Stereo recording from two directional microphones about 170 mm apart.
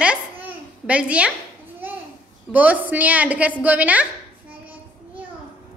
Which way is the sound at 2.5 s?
10° right (ahead or behind).